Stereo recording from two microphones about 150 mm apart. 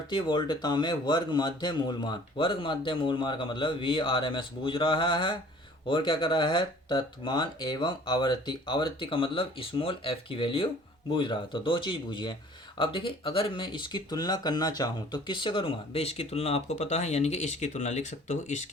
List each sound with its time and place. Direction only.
0.1 s speech: 30° left (ahead or behind); by 18.7 s 50° left (ahead or behind)